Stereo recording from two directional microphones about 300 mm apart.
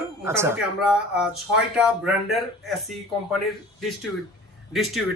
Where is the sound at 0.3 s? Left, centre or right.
Centre.